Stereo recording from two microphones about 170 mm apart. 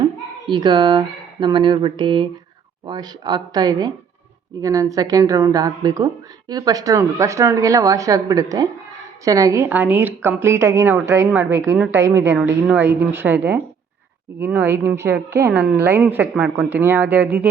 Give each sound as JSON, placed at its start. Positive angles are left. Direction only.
{"t": 0.4, "sound": "a woman's voice", "side_deg": -25}